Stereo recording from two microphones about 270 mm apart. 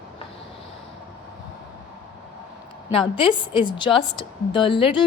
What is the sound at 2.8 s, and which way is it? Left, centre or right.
A woman's voice, left.